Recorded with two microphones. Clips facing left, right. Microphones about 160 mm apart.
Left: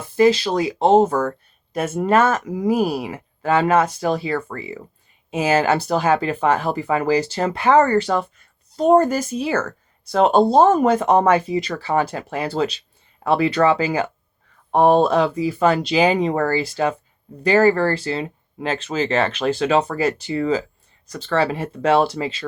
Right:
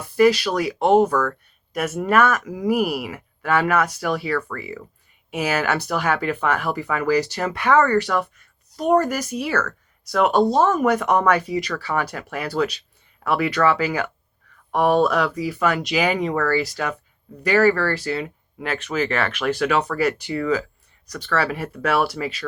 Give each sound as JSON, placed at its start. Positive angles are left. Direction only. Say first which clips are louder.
{"t": 0.0, "sound": "speech", "louder": "left 1 dB", "side_deg": 25}